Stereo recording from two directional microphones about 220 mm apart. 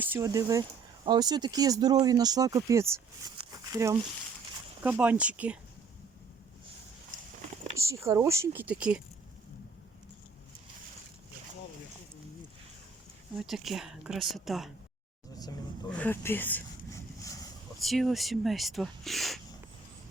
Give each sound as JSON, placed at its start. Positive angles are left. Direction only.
{"t": 0.0, "sound": "speech", "side_deg": -10}
{"t": 3.3, "sound": "crumpling", "side_deg": -15}
{"t": 4.8, "sound": "speech", "side_deg": -5}
{"t": 7.8, "sound": "speech", "side_deg": -15}
{"t": 13.4, "sound": "speech", "side_deg": 0}
{"t": 15.9, "sound": "a sound", "side_deg": 10}
{"t": 17.8, "sound": "speech", "side_deg": 0}